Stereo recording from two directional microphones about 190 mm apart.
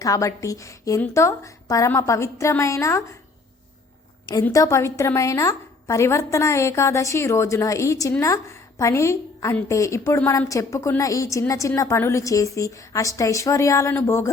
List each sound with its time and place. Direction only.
0.0 s a woman's voice: 15° left (ahead or behind)
4.4 s a woman's voice: 15° left (ahead or behind)